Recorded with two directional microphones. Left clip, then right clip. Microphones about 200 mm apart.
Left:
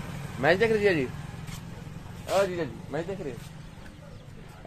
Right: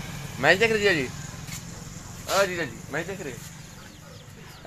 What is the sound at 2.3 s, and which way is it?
Speech, centre (ahead or behind).